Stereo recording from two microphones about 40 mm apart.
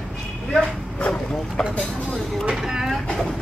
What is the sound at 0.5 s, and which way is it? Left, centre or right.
Dog, centre.